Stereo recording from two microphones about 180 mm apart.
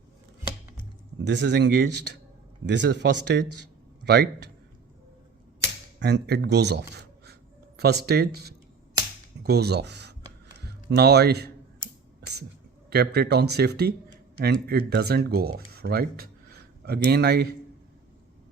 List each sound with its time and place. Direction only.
1.2 s speech: 75° right (ahead or behind)
6.0 s speech: 70° right (ahead or behind)
12.2 s a sound: 65° right (ahead or behind)
12.9 s speech: 65° right (ahead or behind)